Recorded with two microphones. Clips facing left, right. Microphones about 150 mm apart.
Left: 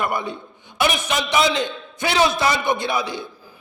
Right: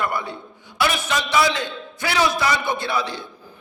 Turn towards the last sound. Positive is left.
turn(degrees=15)  # may be behind; listen again after turning